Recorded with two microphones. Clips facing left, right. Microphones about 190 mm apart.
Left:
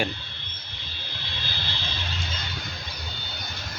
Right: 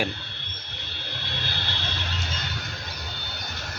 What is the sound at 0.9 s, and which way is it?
Vehicle, 65° right (ahead or behind).